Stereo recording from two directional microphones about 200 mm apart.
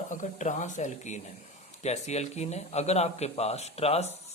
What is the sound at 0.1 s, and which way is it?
Speech, 35° left (ahead or behind).